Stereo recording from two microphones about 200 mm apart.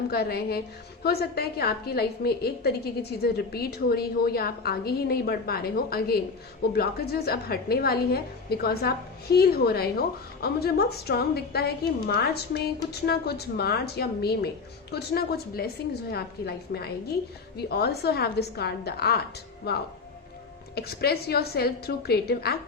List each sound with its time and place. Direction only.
0.1 s a woman's voice: 50° left (ahead or behind)